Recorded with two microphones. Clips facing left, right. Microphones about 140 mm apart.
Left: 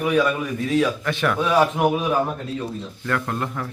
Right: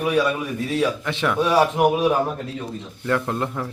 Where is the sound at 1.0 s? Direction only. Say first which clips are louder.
Left 1 dB; 20° right (ahead or behind).